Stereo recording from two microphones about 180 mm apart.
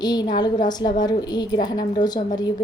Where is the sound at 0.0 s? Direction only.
20° left (ahead or behind).